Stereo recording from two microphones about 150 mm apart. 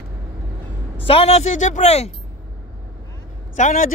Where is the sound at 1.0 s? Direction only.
40° left (ahead or behind).